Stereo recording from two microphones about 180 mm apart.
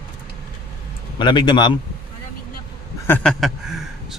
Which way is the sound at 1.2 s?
25° left (ahead or behind).